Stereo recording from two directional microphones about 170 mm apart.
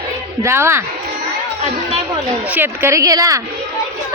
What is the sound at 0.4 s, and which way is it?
Speech, 15° right (ahead or behind).